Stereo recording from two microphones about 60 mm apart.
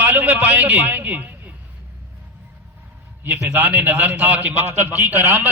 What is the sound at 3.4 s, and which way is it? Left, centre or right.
A man's voice, right.